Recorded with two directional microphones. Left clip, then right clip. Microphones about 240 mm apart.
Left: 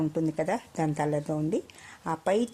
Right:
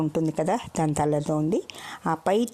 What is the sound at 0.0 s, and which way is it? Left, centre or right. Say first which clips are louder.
Speech: right 3 dB; right.